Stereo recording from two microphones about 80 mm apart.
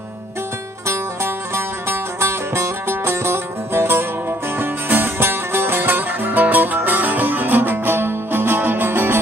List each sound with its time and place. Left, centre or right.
0.8 s music: right